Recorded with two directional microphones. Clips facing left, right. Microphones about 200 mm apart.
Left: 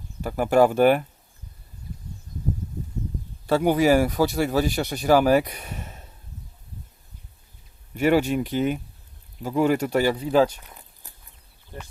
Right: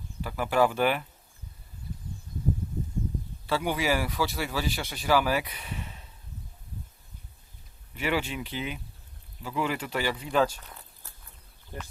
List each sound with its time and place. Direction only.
0.2 s speech: 45° left (ahead or behind)
3.4 s speech: 45° left (ahead or behind)
7.9 s speech: 45° left (ahead or behind)
10.2 s speech: 25° left (ahead or behind)
10.6 s a sound: 15° left (ahead or behind)